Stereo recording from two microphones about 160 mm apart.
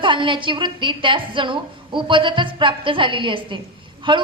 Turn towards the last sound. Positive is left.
turn(degrees=-30)  # may be behind; listen again after turning